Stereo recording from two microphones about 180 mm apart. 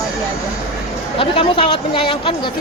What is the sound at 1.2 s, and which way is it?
Speech, 30° left (ahead or behind).